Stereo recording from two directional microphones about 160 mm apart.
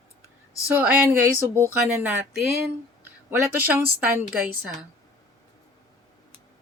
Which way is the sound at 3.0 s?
15° right (ahead or behind).